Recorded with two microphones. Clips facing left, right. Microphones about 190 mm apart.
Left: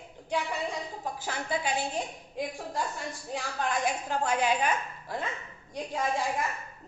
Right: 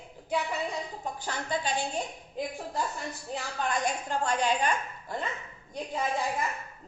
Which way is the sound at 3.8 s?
5° left (ahead or behind).